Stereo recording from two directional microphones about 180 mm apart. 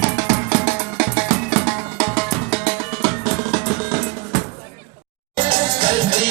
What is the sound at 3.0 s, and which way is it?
Music, 20° left (ahead or behind).